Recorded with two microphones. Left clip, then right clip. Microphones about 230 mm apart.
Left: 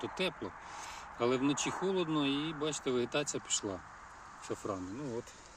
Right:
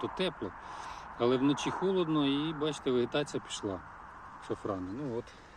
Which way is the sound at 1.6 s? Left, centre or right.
Left.